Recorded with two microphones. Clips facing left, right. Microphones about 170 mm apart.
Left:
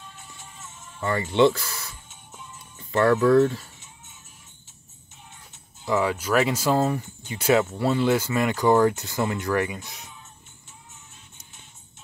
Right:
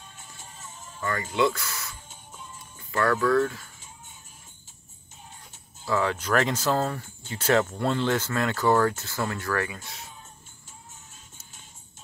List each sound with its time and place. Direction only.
1.3 s speech: 30° left (ahead or behind)
2.9 s speech: 25° left (ahead or behind)
5.9 s speech: 10° left (ahead or behind)